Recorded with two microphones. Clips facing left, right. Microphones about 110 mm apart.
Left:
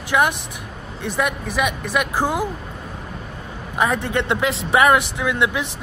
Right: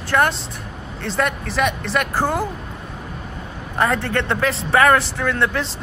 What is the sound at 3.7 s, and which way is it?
Speech, 15° left (ahead or behind).